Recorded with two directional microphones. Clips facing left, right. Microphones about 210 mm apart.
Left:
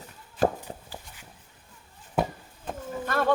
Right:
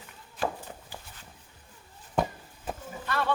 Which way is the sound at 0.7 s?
35° left (ahead or behind).